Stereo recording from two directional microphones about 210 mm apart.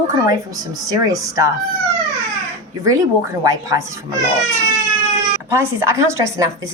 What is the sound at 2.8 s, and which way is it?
A woman's voice, 15° right (ahead or behind).